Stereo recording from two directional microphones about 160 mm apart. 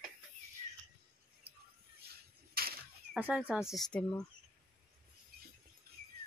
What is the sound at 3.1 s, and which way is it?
Speech, 10° right (ahead or behind).